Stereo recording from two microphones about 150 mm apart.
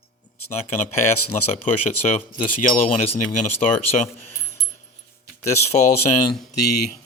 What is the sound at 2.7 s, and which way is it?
Speech, 55° left (ahead or behind).